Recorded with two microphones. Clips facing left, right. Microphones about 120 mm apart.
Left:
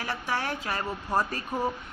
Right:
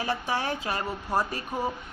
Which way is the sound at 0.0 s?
20° right (ahead or behind).